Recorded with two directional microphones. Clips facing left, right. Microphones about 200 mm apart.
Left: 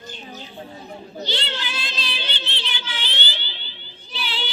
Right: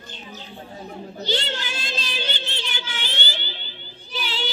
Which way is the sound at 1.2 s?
45° right (ahead or behind).